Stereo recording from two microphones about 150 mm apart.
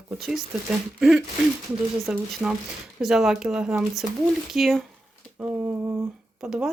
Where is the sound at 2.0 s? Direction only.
5° right (ahead or behind).